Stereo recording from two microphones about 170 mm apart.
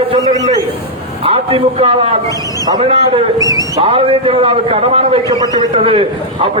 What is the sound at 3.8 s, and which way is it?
A man's voice, 35° right (ahead or behind).